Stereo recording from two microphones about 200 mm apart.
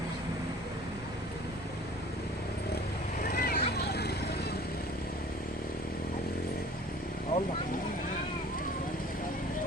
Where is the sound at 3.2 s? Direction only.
50° left (ahead or behind).